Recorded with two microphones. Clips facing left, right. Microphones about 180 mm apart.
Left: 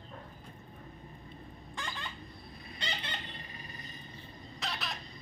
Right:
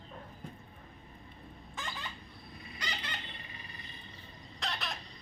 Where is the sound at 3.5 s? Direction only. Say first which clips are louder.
Left 3 dB; 40° left (ahead or behind).